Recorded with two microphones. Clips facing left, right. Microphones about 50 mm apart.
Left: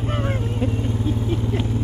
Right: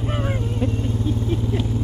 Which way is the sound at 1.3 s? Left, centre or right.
Centre.